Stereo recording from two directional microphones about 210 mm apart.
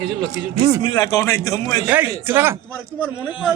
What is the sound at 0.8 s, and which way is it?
A man's voice, 20° left (ahead or behind).